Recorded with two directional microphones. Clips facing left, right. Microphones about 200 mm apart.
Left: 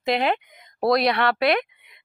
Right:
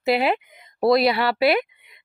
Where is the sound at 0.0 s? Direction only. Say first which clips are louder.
Right 2 dB; 5° right (ahead or behind).